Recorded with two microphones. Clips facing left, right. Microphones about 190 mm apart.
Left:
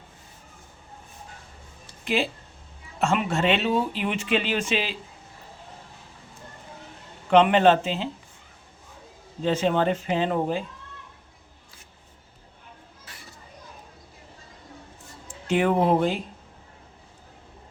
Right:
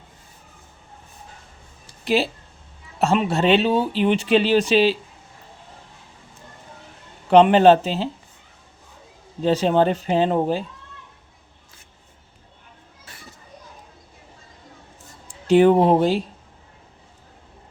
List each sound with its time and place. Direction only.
2.0 s speech: 35° right (ahead or behind)
7.3 s speech: 35° right (ahead or behind)
9.4 s speech: 35° right (ahead or behind)
15.4 s speech: 30° right (ahead or behind)